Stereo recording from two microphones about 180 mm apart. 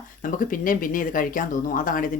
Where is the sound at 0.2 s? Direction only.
50° left (ahead or behind).